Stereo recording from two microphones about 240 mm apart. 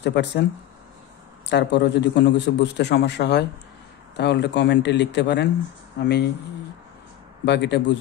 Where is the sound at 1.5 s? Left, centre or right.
Left.